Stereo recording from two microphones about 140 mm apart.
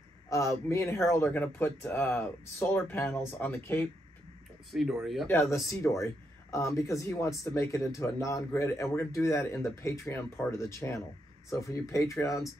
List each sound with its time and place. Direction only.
0.3 s speech: 20° left (ahead or behind)
4.7 s speech: centre (ahead or behind)
5.3 s speech: 20° left (ahead or behind)